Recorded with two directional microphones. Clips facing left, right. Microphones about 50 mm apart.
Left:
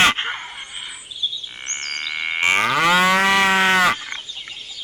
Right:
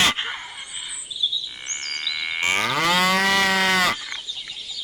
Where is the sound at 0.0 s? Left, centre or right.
Left.